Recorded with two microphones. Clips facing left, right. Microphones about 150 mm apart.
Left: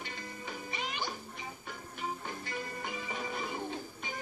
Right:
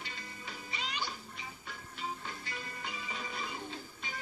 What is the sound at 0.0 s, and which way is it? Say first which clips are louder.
Music: left 4 dB; 50° left (ahead or behind).